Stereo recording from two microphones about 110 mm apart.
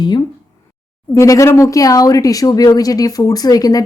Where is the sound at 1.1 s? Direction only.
30° left (ahead or behind).